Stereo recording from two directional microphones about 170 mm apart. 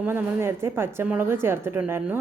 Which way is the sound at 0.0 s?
10° right (ahead or behind).